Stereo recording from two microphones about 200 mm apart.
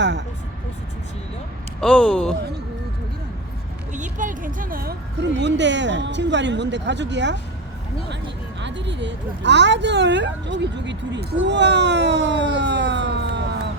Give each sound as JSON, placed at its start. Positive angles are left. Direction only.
{"t": 0.0, "sound": "vehicle", "side_deg": -60}
{"t": 1.8, "sound": "speech", "side_deg": 5}
{"t": 3.9, "sound": "speech", "side_deg": -40}
{"t": 8.6, "sound": "speech", "side_deg": -60}